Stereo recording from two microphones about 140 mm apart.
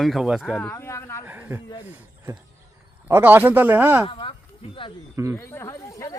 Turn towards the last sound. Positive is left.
turn(degrees=25)  # may be behind; listen again after turning